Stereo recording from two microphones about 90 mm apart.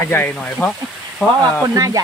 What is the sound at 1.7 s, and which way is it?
Speech, 45° right (ahead or behind).